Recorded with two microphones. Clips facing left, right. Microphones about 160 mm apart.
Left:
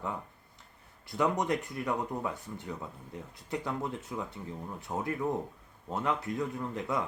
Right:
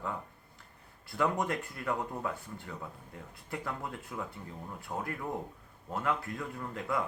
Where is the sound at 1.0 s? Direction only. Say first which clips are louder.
Left 2 dB; 20° left (ahead or behind).